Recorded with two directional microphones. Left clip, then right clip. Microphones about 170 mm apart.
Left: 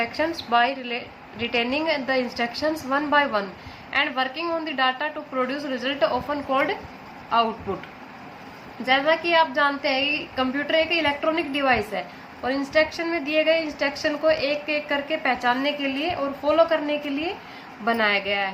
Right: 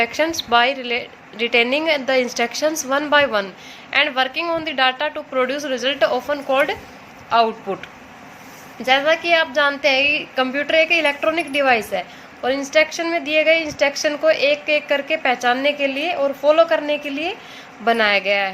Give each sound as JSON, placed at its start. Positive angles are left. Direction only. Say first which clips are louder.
{"t": 0.0, "sound": "a woman's voice", "louder": "right 6 dB", "side_deg": -45}
{"t": 8.9, "sound": "a woman's voice", "louder": "right 4 dB", "side_deg": -45}